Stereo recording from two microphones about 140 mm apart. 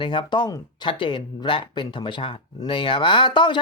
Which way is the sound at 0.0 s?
35° left (ahead or behind).